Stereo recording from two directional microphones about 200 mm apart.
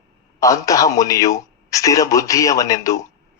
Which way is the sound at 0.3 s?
15° left (ahead or behind).